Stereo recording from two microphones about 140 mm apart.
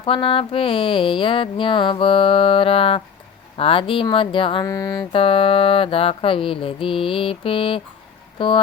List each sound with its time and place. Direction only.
0.0 s music: 40° left (ahead or behind)